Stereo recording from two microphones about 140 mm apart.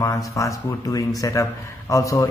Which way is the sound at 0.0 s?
25° left (ahead or behind).